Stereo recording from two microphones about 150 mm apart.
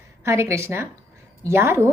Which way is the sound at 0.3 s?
20° right (ahead or behind).